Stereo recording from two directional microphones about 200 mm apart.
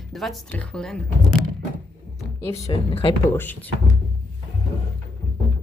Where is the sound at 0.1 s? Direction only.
Centre (ahead or behind).